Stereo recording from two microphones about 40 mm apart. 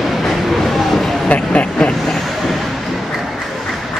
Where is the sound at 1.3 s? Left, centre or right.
Left.